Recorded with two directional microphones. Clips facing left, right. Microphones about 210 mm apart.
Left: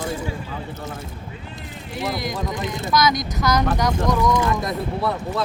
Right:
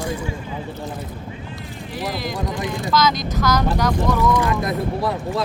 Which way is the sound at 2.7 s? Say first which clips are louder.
Even; 20° left (ahead or behind).